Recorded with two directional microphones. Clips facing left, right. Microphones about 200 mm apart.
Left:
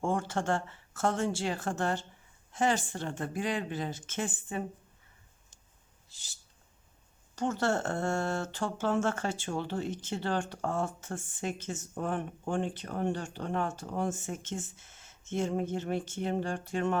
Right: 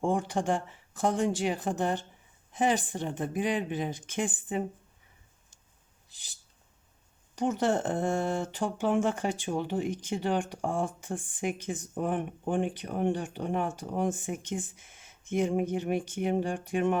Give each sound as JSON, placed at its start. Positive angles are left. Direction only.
{"t": 0.0, "sound": "speech", "side_deg": -15}
{"t": 6.1, "sound": "a sound", "side_deg": -15}
{"t": 7.3, "sound": "speech", "side_deg": -15}